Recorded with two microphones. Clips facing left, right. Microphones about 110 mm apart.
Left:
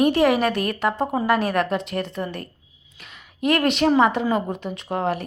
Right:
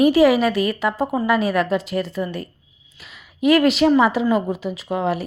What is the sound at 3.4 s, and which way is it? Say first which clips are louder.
Speech: right 5 dB; 30° left (ahead or behind).